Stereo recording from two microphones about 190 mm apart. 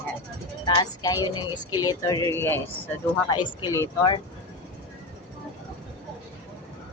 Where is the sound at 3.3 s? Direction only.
25° left (ahead or behind).